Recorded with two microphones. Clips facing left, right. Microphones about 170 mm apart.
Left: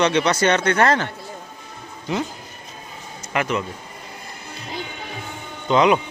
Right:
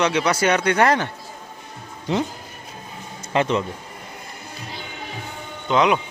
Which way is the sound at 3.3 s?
30° right (ahead or behind).